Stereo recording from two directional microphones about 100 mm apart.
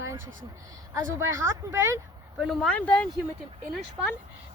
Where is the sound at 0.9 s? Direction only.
30° right (ahead or behind).